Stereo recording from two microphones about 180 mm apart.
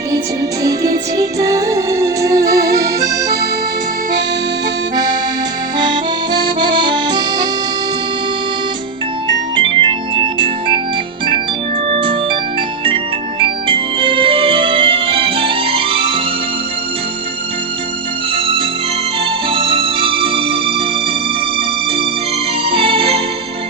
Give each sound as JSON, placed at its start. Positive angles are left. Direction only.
{"t": 0.6, "sound": "music", "side_deg": -20}
{"t": 6.6, "sound": "accordion", "side_deg": -25}
{"t": 9.6, "sound": "organ", "side_deg": -30}
{"t": 11.9, "sound": "organ", "side_deg": -30}
{"t": 13.4, "sound": "organ", "side_deg": -30}
{"t": 19.2, "sound": "music", "side_deg": -30}
{"t": 22.7, "sound": "music", "side_deg": -30}